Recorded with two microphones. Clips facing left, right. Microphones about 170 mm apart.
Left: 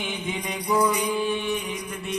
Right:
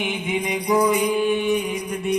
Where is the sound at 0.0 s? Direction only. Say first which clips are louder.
Right 6 dB; 15° right (ahead or behind).